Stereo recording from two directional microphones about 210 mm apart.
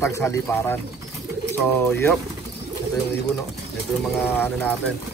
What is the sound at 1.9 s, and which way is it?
Speech, 10° left (ahead or behind).